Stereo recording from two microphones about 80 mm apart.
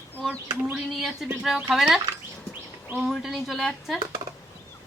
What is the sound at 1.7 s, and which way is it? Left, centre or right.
Speech, centre.